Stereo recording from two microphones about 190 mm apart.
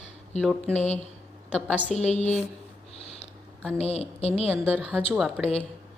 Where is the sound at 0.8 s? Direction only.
35° left (ahead or behind).